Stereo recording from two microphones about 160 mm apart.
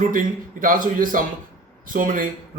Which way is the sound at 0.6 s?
60° right (ahead or behind).